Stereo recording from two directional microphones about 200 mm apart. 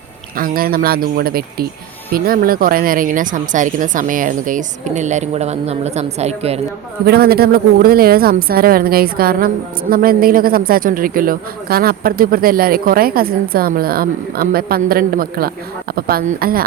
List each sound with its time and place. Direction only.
0.3 s speech: 45° right (ahead or behind)
7.0 s speech: 50° right (ahead or behind)